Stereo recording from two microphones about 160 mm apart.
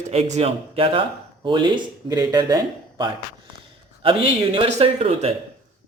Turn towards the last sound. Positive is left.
turn(degrees=-40)  # may be behind; listen again after turning